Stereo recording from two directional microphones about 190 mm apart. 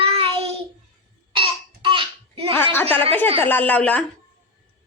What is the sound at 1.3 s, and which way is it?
Babbling, 25° right (ahead or behind).